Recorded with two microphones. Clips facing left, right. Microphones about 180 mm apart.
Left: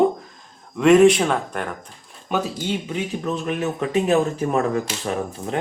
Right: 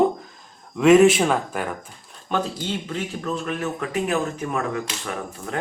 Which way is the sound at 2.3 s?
10° left (ahead or behind).